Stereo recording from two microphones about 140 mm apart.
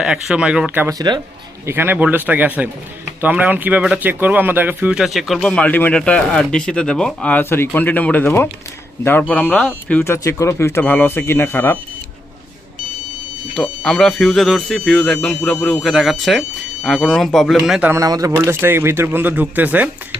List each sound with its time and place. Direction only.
0.0 s speech: 5° right (ahead or behind)
0.9 s speech: 30° right (ahead or behind)
1.6 s speech: 15° right (ahead or behind); by 10.0 s 5° left (ahead or behind)
10.0 s speech: 20° left (ahead or behind)
13.6 s speech: 5° left (ahead or behind)
17.9 s speech: 25° right (ahead or behind)